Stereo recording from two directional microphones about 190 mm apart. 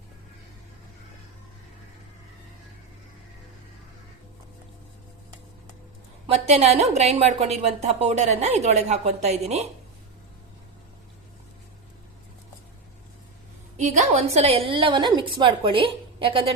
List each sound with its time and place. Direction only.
6.2 s a woman's voice: 35° right (ahead or behind)
13.7 s a woman's voice: 40° right (ahead or behind)